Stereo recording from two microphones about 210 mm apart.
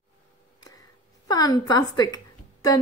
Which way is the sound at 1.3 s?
20° left (ahead or behind).